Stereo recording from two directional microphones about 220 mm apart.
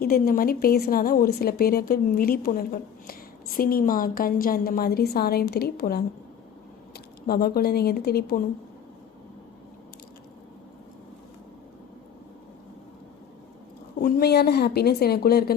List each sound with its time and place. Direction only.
0.0 s a woman's voice: 40° left (ahead or behind)
14.0 s a woman's voice: 45° left (ahead or behind)